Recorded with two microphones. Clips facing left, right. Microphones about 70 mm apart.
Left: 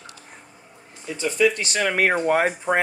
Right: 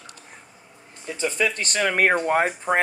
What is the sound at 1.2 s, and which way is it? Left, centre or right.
Speech, right.